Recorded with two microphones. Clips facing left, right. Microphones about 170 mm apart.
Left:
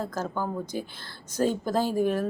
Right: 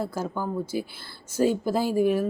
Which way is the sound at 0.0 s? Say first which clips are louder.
Right 1 dB; 10° right (ahead or behind).